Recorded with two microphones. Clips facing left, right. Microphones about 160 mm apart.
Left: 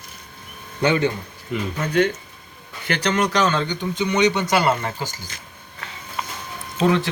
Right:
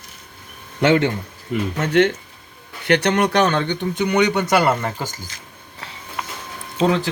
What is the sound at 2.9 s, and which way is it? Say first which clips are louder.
Speech: right 4 dB; 65° right (ahead or behind).